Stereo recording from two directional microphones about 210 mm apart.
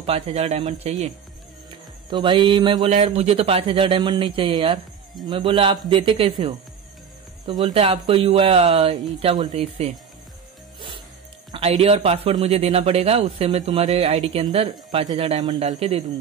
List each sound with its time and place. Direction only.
0.0 s speech: 30° right (ahead or behind)
2.0 s a man's voice: 20° right (ahead or behind)
7.6 s a man's voice: 25° right (ahead or behind)
11.5 s a man's voice: 30° right (ahead or behind)